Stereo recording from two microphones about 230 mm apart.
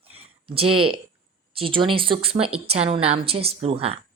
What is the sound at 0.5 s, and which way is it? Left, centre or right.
Speech, right.